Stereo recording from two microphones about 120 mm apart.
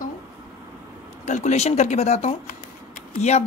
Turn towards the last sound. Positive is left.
turn(degrees=70)  # may be behind; listen again after turning